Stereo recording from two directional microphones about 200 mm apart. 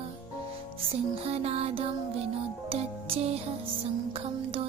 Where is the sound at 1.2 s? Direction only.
30° right (ahead or behind).